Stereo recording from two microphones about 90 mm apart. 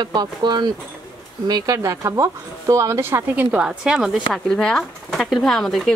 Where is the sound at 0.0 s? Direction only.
55° right (ahead or behind).